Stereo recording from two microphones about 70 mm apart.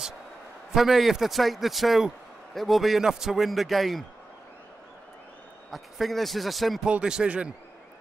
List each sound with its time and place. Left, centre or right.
0.7 s a man's voice: centre
5.7 s a man's voice: centre
6.9 s speech: centre